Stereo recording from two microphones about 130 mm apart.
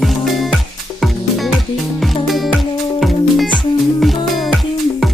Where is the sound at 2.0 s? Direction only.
Centre (ahead or behind).